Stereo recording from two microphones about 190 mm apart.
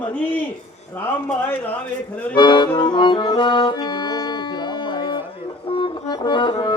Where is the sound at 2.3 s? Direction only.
25° left (ahead or behind).